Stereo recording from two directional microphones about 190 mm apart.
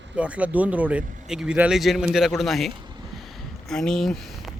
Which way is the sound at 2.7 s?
25° right (ahead or behind).